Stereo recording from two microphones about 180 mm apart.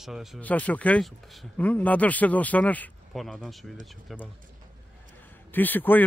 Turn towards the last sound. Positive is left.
turn(degrees=10)  # may be behind; listen again after turning